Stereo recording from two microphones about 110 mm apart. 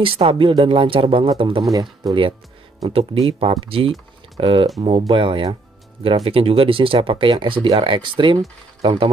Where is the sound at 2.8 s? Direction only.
60° right (ahead or behind).